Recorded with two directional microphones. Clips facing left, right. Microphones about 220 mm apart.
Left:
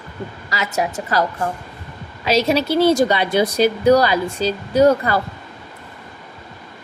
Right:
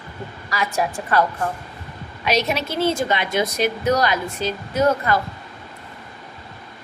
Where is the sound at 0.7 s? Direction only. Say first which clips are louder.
Left 3 dB; 20° left (ahead or behind).